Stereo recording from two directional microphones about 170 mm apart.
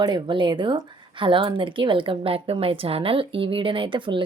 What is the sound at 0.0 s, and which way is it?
A woman's voice, 25° right (ahead or behind).